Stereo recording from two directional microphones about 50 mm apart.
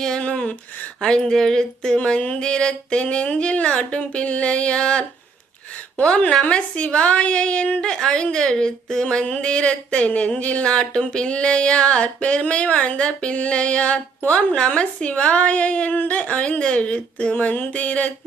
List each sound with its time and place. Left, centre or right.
0.2 s a sound: left
1.0 s a woman's voice: centre
6.1 s speech: centre
6.4 s a woman's voice: left